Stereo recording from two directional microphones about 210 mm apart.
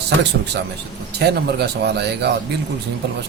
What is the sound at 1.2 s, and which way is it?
Speech, 50° right (ahead or behind).